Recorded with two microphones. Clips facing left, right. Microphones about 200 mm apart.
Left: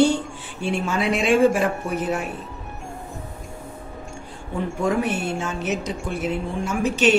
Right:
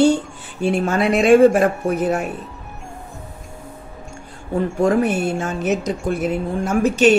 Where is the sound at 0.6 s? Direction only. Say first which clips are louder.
Right 6 dB; 45° right (ahead or behind).